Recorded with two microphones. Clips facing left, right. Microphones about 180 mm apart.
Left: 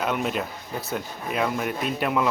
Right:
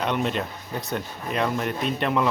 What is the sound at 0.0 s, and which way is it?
Speech, 5° left (ahead or behind).